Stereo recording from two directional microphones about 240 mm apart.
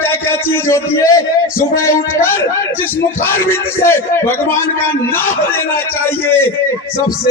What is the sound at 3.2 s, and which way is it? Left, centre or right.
A man's voice, centre.